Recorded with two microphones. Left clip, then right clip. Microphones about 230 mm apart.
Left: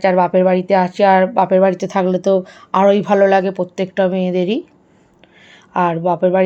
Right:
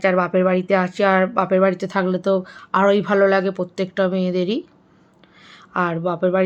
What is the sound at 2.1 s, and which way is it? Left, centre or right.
Speech, right.